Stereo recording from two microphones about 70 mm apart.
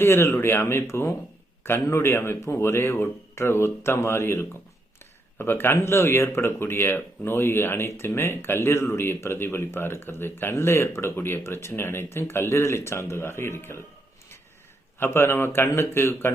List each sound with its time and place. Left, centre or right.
0.0 s speech: left
14.9 s speech: left